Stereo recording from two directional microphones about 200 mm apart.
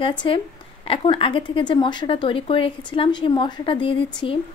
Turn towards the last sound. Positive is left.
turn(degrees=25)  # may be behind; listen again after turning